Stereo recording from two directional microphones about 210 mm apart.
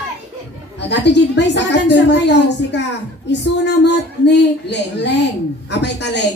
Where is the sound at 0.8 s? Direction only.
55° left (ahead or behind).